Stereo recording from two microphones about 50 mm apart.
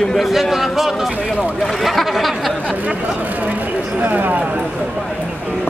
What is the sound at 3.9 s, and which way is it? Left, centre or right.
Speech, right.